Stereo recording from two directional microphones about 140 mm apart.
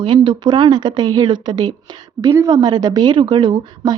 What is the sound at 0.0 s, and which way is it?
A woman's voice, 35° right (ahead or behind).